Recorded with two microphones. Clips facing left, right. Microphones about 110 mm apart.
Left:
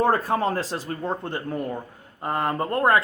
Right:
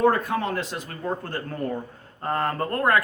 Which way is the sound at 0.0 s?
35° left (ahead or behind).